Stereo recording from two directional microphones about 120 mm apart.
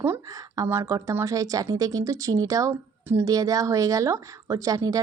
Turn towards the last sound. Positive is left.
turn(degrees=-30)  # may be behind; listen again after turning